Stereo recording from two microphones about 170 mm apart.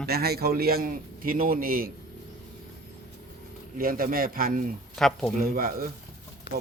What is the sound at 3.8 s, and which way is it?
Speech, 55° right (ahead or behind).